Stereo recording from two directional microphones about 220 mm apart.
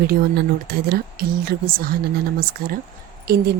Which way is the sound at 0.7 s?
45° right (ahead or behind).